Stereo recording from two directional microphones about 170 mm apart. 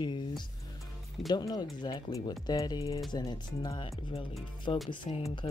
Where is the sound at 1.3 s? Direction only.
25° left (ahead or behind).